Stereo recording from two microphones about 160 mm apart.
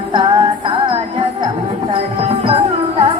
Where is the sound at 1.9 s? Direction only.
35° right (ahead or behind).